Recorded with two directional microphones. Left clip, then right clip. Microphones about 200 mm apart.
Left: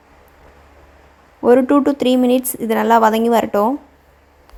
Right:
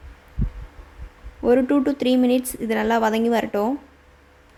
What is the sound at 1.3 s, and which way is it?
Speech, 20° left (ahead or behind).